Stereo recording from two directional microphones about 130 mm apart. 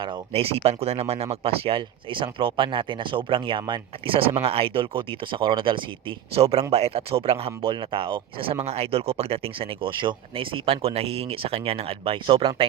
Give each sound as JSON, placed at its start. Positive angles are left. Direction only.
{"t": 0.0, "sound": "speech", "side_deg": -40}